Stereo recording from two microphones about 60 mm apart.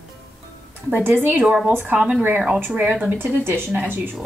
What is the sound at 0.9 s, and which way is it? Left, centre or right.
Speech, right.